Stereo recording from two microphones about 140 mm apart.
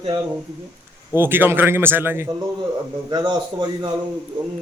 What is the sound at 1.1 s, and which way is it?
Speech, 15° right (ahead or behind).